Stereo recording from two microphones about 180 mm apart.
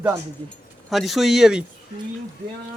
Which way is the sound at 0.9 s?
Centre (ahead or behind).